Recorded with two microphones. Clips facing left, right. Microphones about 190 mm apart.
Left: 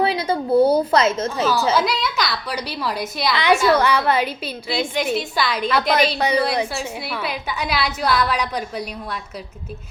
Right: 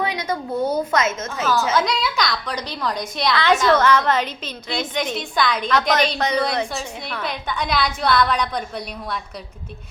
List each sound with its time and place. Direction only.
0.0 s a woman's voice: 30° left (ahead or behind)
1.7 s a woman's voice: 5° left (ahead or behind)